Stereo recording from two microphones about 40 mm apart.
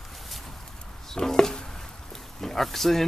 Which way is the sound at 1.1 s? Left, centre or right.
Centre.